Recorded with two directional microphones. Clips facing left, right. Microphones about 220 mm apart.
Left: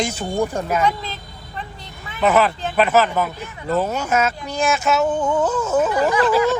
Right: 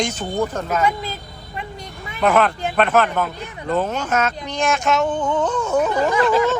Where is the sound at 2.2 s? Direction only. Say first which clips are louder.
Even; 5° left (ahead or behind).